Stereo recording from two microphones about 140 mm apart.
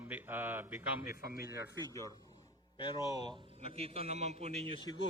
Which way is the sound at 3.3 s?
45° right (ahead or behind).